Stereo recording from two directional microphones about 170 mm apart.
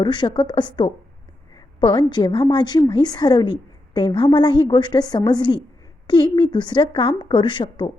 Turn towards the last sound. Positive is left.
turn(degrees=30)  # may be behind; listen again after turning